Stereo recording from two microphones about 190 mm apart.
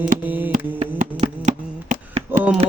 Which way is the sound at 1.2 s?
35° right (ahead or behind).